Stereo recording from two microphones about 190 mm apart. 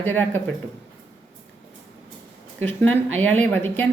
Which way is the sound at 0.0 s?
10° left (ahead or behind).